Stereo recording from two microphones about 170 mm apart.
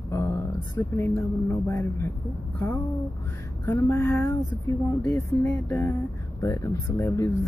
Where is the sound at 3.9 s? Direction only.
15° left (ahead or behind).